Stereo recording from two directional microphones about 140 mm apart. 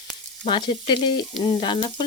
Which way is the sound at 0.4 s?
35° left (ahead or behind).